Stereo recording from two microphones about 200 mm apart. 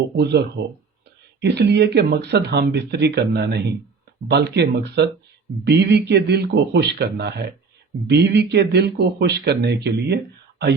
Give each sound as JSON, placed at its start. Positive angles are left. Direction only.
{"t": 0.2, "sound": "speech", "side_deg": -55}